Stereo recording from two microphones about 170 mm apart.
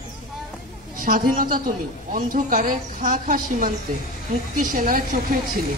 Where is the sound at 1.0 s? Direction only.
55° right (ahead or behind).